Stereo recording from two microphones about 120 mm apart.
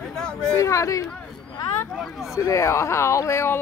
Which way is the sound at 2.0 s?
Centre (ahead or behind).